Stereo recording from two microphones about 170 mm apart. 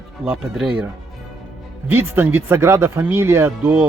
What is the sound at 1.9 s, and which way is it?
Speech, 10° right (ahead or behind).